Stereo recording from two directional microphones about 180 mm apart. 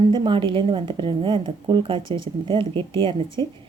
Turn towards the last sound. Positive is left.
turn(degrees=-30)  # may be behind; listen again after turning